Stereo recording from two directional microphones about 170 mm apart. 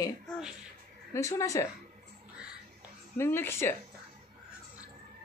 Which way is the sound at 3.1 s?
15° left (ahead or behind).